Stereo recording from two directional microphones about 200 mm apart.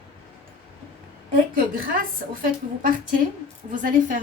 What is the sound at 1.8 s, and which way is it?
A woman's voice, 45° right (ahead or behind).